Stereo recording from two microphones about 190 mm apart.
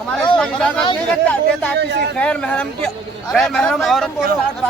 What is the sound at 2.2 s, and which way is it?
Speech, 5° left (ahead or behind).